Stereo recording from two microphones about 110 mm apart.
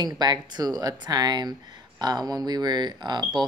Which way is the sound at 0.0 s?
40° right (ahead or behind).